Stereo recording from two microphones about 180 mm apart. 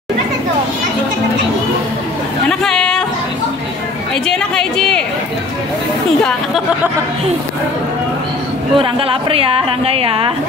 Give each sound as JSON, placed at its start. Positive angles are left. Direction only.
{"t": 2.6, "sound": "chatter", "side_deg": 5}
{"t": 4.3, "sound": "speech", "side_deg": 5}
{"t": 8.7, "sound": "a woman's voice", "side_deg": -30}